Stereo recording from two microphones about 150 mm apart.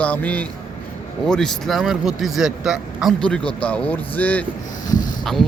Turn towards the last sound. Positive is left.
turn(degrees=60)  # may be behind; listen again after turning